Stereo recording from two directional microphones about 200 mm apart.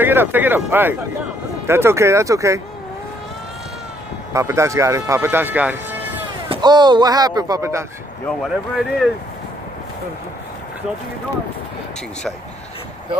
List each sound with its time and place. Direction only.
0.0 s speech: 10° right (ahead or behind)
4.3 s speech: 15° right (ahead or behind)
6.5 s speech: 20° right (ahead or behind)
8.3 s speech: centre (ahead or behind)